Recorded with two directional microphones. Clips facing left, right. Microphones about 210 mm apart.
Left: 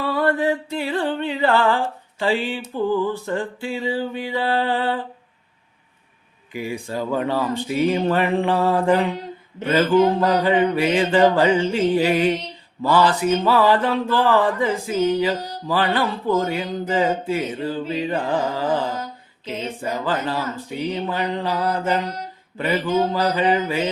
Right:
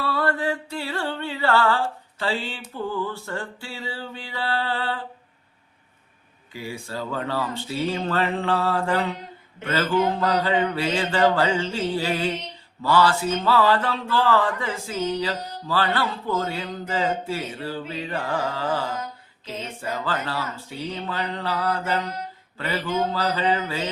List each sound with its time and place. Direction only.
0.0 s music: 15° left (ahead or behind)
6.5 s speech: 15° left (ahead or behind)